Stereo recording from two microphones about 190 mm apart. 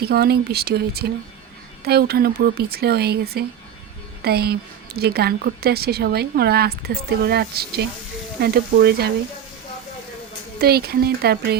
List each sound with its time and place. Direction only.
0.0 s a woman's voice: 55° right (ahead or behind)
10.6 s a woman's voice: 55° right (ahead or behind)